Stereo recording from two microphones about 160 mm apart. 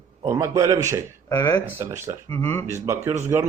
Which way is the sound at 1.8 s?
15° right (ahead or behind).